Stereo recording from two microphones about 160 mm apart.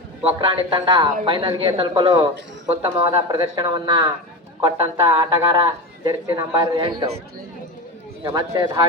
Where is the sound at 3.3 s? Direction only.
25° right (ahead or behind).